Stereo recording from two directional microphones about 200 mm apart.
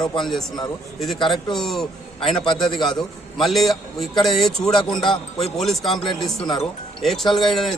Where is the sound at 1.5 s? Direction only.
Centre (ahead or behind).